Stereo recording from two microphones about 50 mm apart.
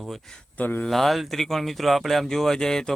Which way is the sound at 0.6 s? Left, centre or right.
Left.